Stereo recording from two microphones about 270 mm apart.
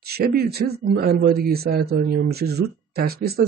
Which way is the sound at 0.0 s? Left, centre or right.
Right.